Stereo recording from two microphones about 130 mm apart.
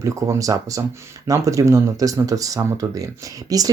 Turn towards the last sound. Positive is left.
turn(degrees=-25)  # may be behind; listen again after turning